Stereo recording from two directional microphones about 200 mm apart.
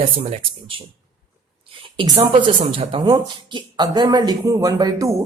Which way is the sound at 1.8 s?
25° right (ahead or behind).